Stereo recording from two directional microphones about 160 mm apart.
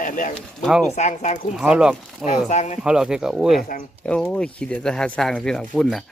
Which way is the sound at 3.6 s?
60° left (ahead or behind).